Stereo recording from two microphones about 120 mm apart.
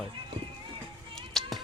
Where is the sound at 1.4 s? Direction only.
5° left (ahead or behind).